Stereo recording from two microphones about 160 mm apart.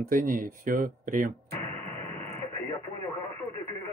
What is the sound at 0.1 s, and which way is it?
Speech, 55° right (ahead or behind).